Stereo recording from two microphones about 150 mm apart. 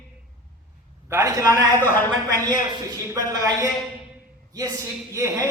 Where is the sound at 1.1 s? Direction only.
20° right (ahead or behind).